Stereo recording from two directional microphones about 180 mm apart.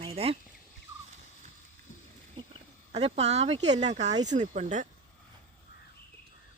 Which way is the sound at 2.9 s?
35° right (ahead or behind).